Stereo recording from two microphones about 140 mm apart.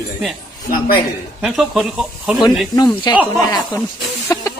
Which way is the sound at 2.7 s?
30° left (ahead or behind).